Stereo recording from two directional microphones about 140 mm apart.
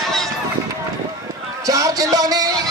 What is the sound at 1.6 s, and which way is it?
Music, 25° right (ahead or behind).